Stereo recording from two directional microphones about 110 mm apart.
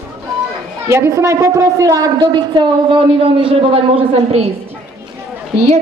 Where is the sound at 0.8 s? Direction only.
25° right (ahead or behind); by 4.5 s 65° right (ahead or behind).